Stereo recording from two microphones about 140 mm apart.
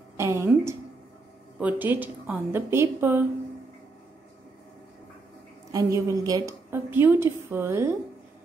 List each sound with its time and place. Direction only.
0.2 s a woman's voice: 20° right (ahead or behind)
1.6 s a woman's voice: 10° right (ahead or behind)
5.7 s a woman's voice: 25° right (ahead or behind)
6.7 s a woman's voice: 15° right (ahead or behind)